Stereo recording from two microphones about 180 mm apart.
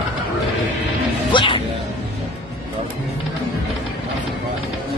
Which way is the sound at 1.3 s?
25° left (ahead or behind).